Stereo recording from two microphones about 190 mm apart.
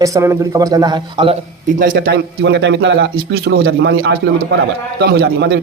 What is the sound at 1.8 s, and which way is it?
A man's voice, 55° right (ahead or behind).